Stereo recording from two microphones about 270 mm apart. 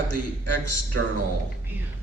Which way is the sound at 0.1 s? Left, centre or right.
Left.